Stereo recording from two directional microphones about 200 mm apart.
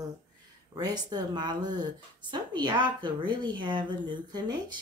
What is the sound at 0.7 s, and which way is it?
A woman's voice, 20° right (ahead or behind).